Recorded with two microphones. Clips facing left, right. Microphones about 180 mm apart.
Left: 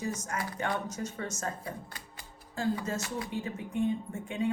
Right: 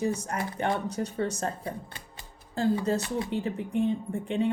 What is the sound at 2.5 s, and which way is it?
Speech, 35° right (ahead or behind).